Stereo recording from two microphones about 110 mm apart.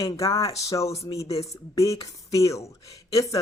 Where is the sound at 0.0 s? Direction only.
30° left (ahead or behind).